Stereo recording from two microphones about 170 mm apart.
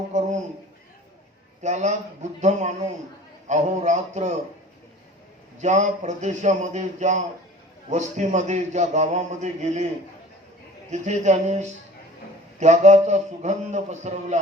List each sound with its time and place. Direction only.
1.6 s a man's voice: 40° right (ahead or behind)
5.5 s a man's voice: 40° right (ahead or behind)
10.9 s a man's voice: 45° right (ahead or behind)